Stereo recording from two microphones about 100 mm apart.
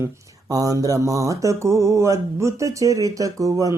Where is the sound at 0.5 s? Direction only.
35° right (ahead or behind).